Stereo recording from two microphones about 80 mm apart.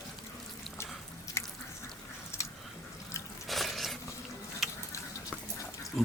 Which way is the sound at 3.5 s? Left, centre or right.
Centre.